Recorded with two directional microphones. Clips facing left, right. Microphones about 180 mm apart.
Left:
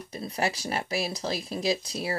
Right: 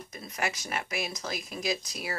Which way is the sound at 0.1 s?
30° left (ahead or behind).